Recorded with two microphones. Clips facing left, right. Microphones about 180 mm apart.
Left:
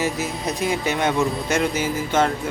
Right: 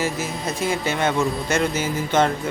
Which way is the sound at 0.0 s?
15° left (ahead or behind).